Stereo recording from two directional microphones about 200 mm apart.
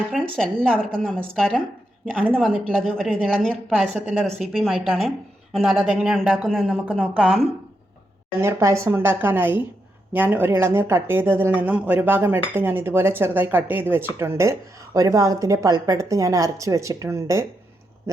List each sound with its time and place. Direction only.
0.1 s speech: centre (ahead or behind); by 17.4 s 15° right (ahead or behind)